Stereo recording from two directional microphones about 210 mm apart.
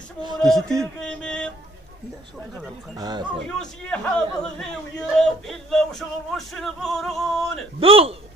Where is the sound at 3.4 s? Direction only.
5° left (ahead or behind).